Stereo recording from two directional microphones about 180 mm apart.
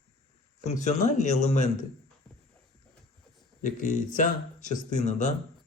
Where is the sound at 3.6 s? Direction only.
45° left (ahead or behind).